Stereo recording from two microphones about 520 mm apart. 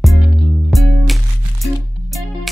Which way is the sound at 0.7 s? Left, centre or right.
Centre.